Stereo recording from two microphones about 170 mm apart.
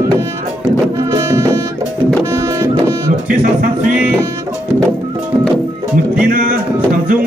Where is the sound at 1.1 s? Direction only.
20° right (ahead or behind).